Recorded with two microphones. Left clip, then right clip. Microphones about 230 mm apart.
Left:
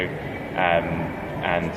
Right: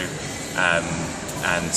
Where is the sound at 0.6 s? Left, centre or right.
Right.